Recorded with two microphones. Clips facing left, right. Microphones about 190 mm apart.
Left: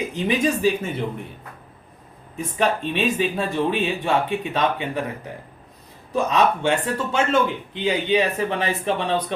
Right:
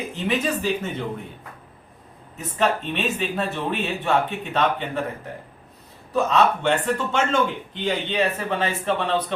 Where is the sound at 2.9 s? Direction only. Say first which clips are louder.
Left 3 dB; 10° left (ahead or behind).